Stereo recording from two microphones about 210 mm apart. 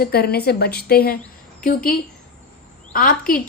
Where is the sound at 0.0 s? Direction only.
45° left (ahead or behind).